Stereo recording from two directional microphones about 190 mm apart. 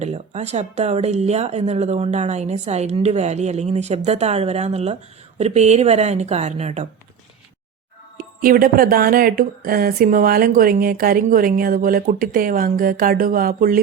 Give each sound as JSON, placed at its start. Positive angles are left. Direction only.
{"t": 0.0, "sound": "speech", "side_deg": -35}
{"t": 8.2, "sound": "speech", "side_deg": -50}